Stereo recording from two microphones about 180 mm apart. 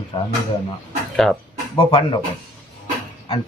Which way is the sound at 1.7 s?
25° left (ahead or behind).